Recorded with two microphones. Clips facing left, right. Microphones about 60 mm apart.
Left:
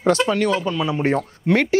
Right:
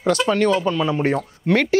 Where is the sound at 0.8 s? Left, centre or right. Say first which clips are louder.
Right 2 dB; centre.